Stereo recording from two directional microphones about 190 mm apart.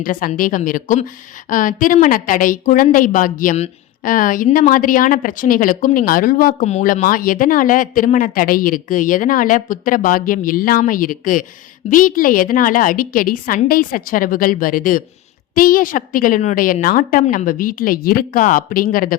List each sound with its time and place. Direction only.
0.0 s a woman's voice: 45° left (ahead or behind)